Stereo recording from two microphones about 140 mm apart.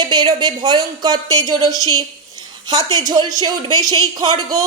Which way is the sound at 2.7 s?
30° right (ahead or behind).